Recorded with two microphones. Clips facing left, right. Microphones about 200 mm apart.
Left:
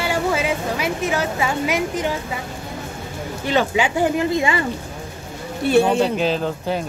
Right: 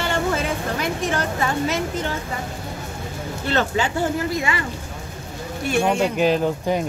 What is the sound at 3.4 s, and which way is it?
Speech, 10° left (ahead or behind).